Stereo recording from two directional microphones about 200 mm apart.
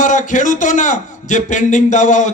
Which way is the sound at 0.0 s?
40° left (ahead or behind).